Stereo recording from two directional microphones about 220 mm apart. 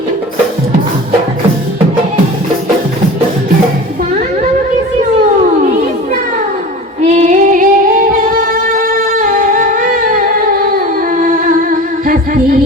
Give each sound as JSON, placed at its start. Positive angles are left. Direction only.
{"t": 7.2, "sound": "music", "side_deg": -35}